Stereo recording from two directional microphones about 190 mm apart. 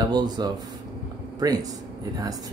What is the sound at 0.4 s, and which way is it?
Speech, 20° right (ahead or behind).